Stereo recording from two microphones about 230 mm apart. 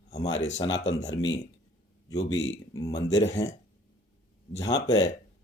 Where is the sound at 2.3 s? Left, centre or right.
Left.